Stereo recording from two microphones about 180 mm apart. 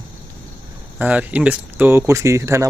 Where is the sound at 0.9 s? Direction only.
10° right (ahead or behind).